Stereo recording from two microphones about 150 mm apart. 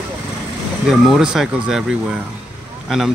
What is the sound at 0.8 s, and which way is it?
Speech, 5° right (ahead or behind).